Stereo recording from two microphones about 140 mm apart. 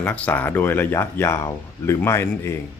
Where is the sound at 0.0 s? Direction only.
15° left (ahead or behind).